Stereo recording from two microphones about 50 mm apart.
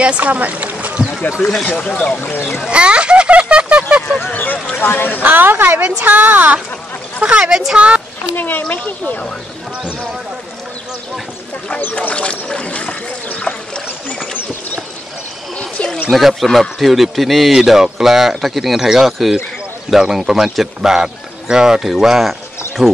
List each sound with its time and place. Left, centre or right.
0.0 s rowboat: right
1.7 s speech: left
2.7 s speech: right
4.3 s speech: left
5.2 s a woman's voice: right
5.8 s speech: right
6.0 s a woman's voice: right
7.2 s a woman's voice: centre
8.4 s speech: left
11.9 s a sound: left
15.5 s a sound: centre
16.1 s a man's voice: centre